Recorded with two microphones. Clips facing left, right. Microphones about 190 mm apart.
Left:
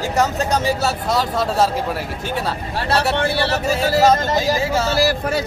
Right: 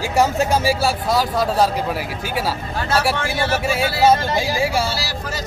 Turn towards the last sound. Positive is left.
turn(degrees=50)  # may be behind; listen again after turning